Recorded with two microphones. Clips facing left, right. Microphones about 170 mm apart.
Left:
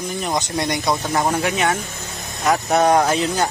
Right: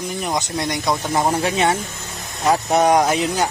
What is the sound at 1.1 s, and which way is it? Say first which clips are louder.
Speech: right 2 dB; 15° right (ahead or behind).